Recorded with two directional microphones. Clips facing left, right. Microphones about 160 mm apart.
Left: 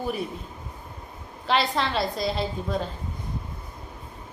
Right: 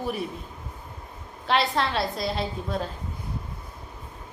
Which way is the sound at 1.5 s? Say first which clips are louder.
Even; centre (ahead or behind).